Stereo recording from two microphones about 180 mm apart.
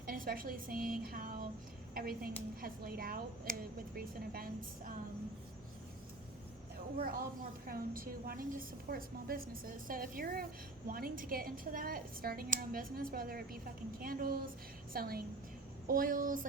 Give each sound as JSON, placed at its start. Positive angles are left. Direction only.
{"t": 0.0, "sound": "a woman's voice", "side_deg": -55}
{"t": 1.0, "sound": "a sound", "side_deg": -50}
{"t": 2.0, "sound": "a woman's voice", "side_deg": -55}
{"t": 7.0, "sound": "a woman's voice", "side_deg": -55}